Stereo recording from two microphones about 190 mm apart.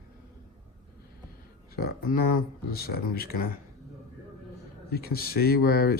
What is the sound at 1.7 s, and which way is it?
Speech, 50° left (ahead or behind).